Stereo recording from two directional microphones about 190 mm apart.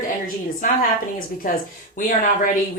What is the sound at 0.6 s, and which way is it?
Speech, 45° left (ahead or behind).